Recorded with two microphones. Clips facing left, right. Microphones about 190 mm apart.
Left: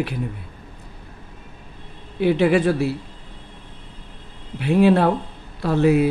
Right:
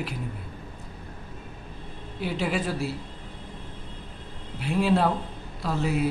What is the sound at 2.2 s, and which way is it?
Speech, 65° left (ahead or behind).